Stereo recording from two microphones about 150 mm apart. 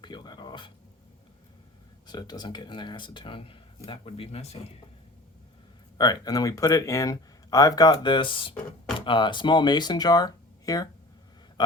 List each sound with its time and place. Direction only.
0.0 s a sound: 30° left (ahead or behind)
2.0 s speech: 25° left (ahead or behind)
6.0 s speech: 25° left (ahead or behind)